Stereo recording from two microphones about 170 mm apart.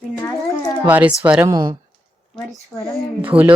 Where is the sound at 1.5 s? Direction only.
20° right (ahead or behind).